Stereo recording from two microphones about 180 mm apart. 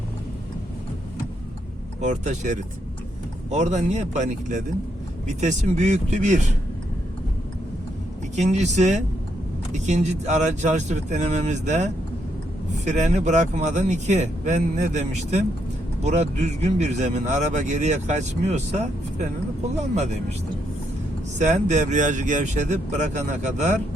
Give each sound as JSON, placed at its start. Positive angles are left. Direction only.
{"t": 2.0, "sound": "speech", "side_deg": -40}
{"t": 8.4, "sound": "speech", "side_deg": -40}
{"t": 21.3, "sound": "speech", "side_deg": -40}